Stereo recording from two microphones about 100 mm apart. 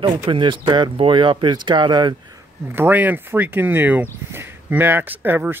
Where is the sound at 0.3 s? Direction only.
55° right (ahead or behind).